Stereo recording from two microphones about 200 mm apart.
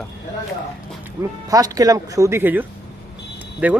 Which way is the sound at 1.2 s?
15° right (ahead or behind).